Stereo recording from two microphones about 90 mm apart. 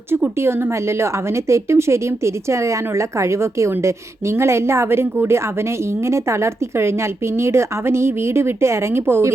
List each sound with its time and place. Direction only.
0.3 s a woman's voice: 30° right (ahead or behind)